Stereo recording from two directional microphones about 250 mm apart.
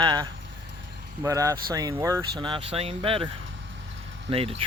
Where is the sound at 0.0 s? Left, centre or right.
Centre.